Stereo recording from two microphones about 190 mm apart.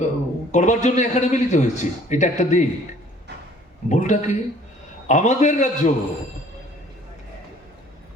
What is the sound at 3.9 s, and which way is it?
A man's voice, 40° left (ahead or behind).